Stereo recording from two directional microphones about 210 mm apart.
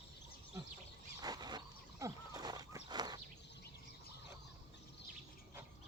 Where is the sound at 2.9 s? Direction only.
20° right (ahead or behind).